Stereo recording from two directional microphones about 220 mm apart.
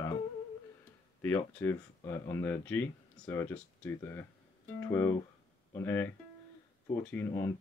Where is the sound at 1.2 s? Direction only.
10° left (ahead or behind).